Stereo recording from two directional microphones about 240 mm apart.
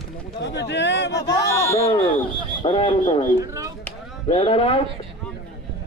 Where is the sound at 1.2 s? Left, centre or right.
Centre.